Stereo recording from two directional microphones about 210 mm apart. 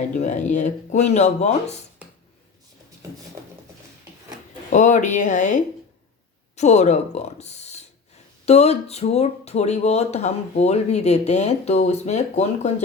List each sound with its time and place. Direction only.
0.1 s speech: 35° left (ahead or behind)
4.7 s speech: 35° left (ahead or behind)